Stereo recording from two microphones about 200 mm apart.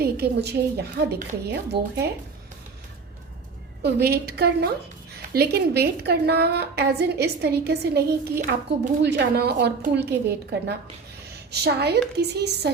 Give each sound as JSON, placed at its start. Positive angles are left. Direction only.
{"t": 0.0, "sound": "a woman's voice", "side_deg": -50}
{"t": 3.8, "sound": "a woman's voice", "side_deg": -55}